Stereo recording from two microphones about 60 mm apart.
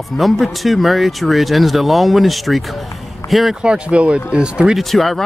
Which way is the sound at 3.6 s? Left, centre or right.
Centre.